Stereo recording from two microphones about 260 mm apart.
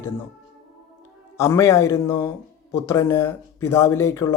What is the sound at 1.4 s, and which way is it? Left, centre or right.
Speech, centre.